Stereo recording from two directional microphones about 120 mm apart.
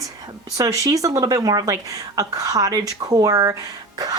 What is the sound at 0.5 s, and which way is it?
Speech, 30° right (ahead or behind).